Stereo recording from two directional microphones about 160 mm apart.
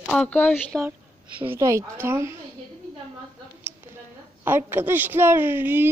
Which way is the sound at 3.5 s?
10° right (ahead or behind).